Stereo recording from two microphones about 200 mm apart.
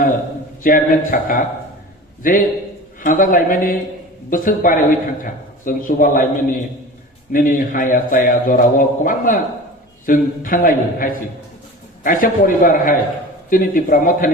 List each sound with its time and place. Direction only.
0.6 s a man's voice: 45° left (ahead or behind)